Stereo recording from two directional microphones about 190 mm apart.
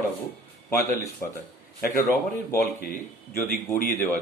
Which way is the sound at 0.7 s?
15° left (ahead or behind).